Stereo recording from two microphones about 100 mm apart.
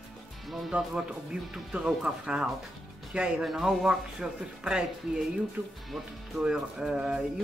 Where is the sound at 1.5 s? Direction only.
10° right (ahead or behind).